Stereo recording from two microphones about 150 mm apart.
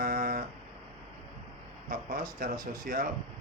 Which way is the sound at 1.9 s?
70° right (ahead or behind).